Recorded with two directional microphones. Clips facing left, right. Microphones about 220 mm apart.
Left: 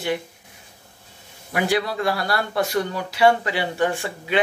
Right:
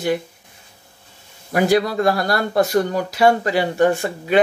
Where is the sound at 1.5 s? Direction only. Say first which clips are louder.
Right 6 dB; 40° right (ahead or behind).